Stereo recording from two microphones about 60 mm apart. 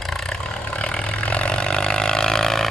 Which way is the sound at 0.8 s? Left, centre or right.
Left.